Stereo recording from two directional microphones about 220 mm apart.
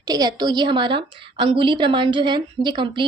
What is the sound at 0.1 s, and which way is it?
A woman's voice, 20° right (ahead or behind).